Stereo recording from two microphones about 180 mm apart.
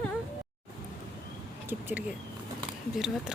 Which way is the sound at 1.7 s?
10° right (ahead or behind).